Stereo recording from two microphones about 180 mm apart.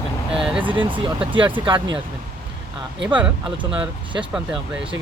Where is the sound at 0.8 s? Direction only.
30° right (ahead or behind).